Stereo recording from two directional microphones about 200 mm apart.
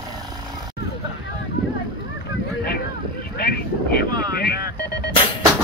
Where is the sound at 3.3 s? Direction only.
50° left (ahead or behind).